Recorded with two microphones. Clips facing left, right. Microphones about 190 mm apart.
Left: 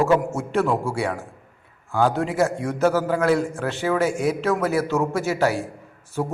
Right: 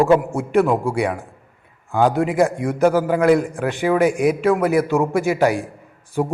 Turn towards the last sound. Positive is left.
turn(degrees=-10)  # may be behind; listen again after turning